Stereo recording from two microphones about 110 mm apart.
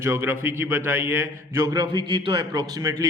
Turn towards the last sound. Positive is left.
turn(degrees=-35)  # may be behind; listen again after turning